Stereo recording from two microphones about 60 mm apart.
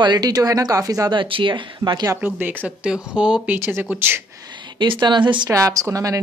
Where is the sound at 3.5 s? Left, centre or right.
Right.